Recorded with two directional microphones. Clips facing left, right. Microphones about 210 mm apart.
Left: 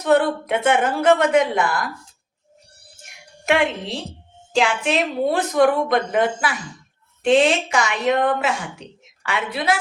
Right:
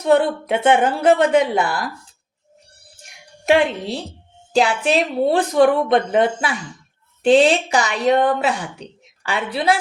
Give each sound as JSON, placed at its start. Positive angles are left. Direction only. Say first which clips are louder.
{"t": 0.0, "sound": "a woman's voice", "louder": "right 1 dB", "side_deg": -30}
{"t": 3.4, "sound": "a woman's voice", "louder": "right 4 dB", "side_deg": -35}